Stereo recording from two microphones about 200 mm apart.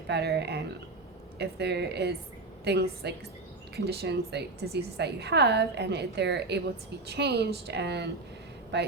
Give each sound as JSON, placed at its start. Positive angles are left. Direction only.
{"t": 0.1, "sound": "a woman's voice", "side_deg": -55}